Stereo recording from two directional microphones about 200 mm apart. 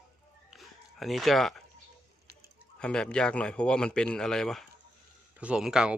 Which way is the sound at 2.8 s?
5° left (ahead or behind).